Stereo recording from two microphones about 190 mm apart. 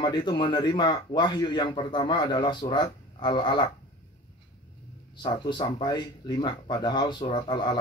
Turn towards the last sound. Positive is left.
turn(degrees=25)  # may be behind; listen again after turning